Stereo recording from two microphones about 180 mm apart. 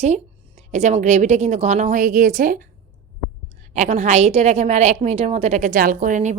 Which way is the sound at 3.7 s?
40° right (ahead or behind).